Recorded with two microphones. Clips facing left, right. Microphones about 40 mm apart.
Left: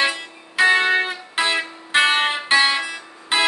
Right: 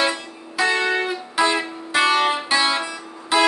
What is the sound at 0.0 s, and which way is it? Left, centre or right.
Music, left.